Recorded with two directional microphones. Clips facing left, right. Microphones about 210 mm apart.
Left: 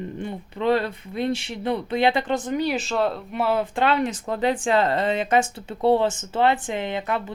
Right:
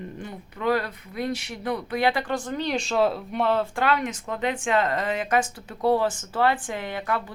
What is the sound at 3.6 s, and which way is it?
Speech, 25° left (ahead or behind).